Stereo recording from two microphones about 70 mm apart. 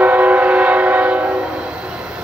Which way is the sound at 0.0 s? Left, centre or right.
Right.